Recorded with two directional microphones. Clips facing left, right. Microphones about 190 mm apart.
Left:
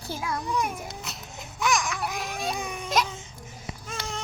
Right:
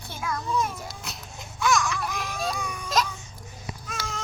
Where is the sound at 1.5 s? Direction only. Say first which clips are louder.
Right 2 dB; 15° left (ahead or behind).